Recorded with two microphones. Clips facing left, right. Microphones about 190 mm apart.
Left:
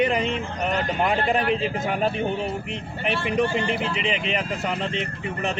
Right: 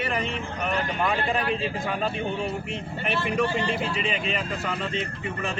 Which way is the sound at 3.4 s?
20° left (ahead or behind).